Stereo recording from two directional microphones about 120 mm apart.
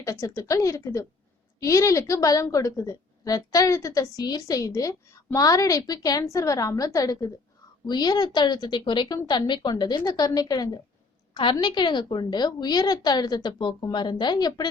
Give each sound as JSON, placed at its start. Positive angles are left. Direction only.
{"t": 0.0, "sound": "a woman's voice", "side_deg": 25}